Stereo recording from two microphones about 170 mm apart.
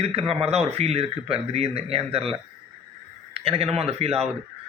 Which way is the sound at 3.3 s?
35° right (ahead or behind).